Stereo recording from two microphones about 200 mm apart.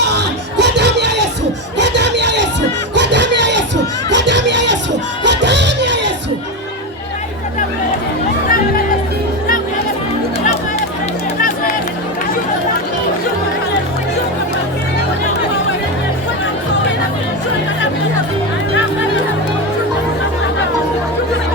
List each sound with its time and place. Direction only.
0.0 s music: 60° right (ahead or behind)
1.8 s a sound: 60° right (ahead or behind)
5.2 s music: 60° right (ahead or behind)